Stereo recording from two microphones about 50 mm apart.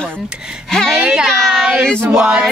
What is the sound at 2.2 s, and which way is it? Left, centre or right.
Speech, right.